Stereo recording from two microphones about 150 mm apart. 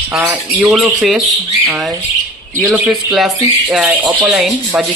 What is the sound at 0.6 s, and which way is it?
Speech, centre (ahead or behind).